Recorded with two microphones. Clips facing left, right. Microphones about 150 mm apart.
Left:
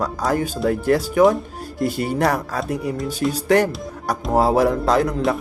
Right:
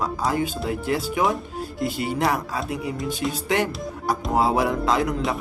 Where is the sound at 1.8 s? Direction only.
45° left (ahead or behind).